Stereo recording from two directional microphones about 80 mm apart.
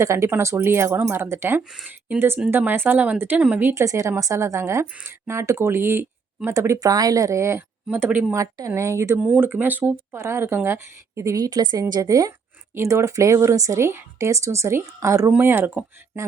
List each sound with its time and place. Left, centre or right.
0.0 s speech: right; by 3.6 s centre
3.6 s speech: right
3.8 s speech: right
7.9 s speech: right
8.7 s speech: right
9.1 s speech: centre; by 11.3 s right
11.3 s a woman's voice: right
12.7 s speech: right
15.3 s speech: right